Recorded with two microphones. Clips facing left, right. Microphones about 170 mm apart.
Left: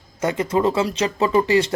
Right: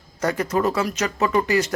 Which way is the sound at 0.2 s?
20° left (ahead or behind).